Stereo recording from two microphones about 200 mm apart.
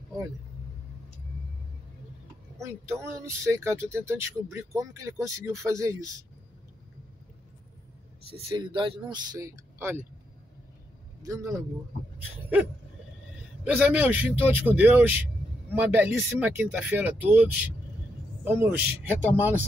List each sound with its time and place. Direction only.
2.6 s speech: 15° right (ahead or behind)
8.3 s speech: 25° right (ahead or behind)
11.2 s speech: 15° right (ahead or behind)
13.7 s speech: 5° right (ahead or behind)